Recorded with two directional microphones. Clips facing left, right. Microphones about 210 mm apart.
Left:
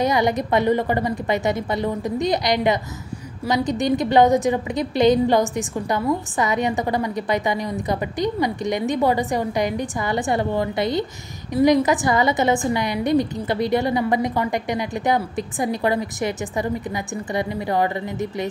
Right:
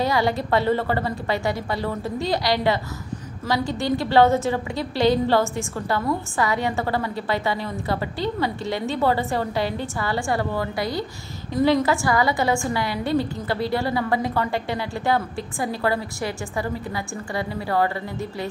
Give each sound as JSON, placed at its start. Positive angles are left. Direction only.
{"t": 0.0, "sound": "a woman's voice", "side_deg": 20}